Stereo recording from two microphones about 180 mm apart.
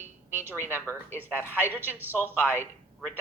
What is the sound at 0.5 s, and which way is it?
Speech, 15° left (ahead or behind).